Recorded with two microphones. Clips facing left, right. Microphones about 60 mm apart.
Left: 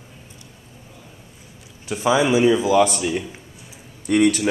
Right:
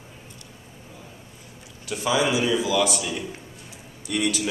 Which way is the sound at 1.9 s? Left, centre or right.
Left.